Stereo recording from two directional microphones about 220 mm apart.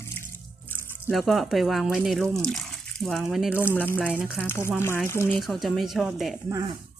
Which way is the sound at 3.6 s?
10° left (ahead or behind).